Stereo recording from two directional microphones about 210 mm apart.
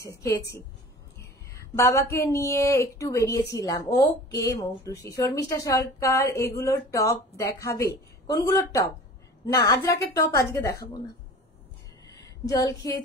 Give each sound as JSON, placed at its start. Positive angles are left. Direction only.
{"t": 1.1, "sound": "whispering", "side_deg": 10}
{"t": 1.8, "sound": "speech", "side_deg": 15}
{"t": 12.4, "sound": "speech", "side_deg": 15}